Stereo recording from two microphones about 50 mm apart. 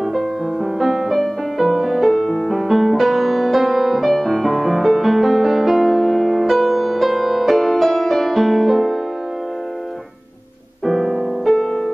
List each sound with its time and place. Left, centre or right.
0.7 s music: centre
2.2 s music: centre
2.5 s music: centre
10.9 s music: centre
11.5 s music: centre